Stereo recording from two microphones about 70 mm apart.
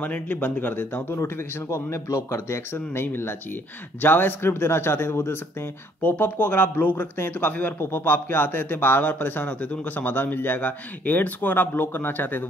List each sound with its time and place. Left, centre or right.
0.0 s a man's voice: left
1.1 s speech: left
6.0 s a man's voice: left